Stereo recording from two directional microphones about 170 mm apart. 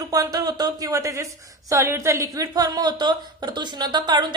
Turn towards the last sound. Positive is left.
turn(degrees=-25)  # may be behind; listen again after turning